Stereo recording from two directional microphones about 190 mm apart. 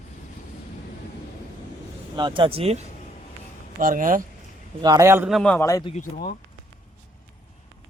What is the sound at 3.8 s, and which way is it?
Speech, 45° right (ahead or behind).